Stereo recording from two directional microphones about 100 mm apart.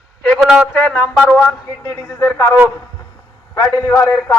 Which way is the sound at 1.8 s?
20° left (ahead or behind).